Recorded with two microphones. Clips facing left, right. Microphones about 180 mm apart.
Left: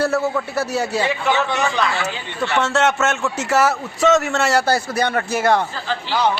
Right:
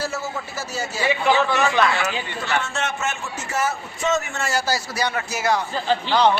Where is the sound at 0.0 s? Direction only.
60° left (ahead or behind).